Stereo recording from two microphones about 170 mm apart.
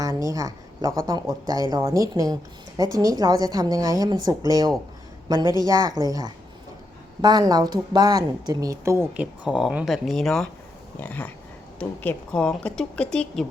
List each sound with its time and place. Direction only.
0.0 s a woman's voice: 20° right (ahead or behind); by 13.4 s 5° left (ahead or behind)